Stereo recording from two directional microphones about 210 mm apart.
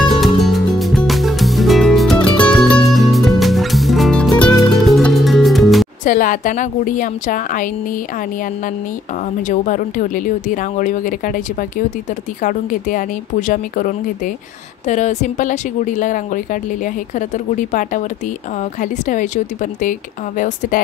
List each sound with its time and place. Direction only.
0.1 s music: centre (ahead or behind)
6.0 s speech: 40° left (ahead or behind)
9.5 s speech: 40° left (ahead or behind)